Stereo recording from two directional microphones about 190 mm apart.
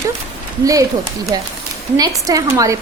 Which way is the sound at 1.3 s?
20° right (ahead or behind).